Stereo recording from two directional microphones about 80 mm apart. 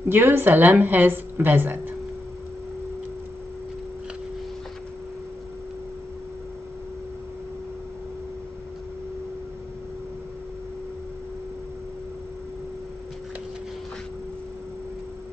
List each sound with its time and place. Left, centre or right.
0.1 s a woman's voice: right